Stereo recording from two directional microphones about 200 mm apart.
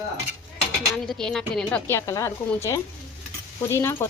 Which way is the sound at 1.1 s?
5° left (ahead or behind).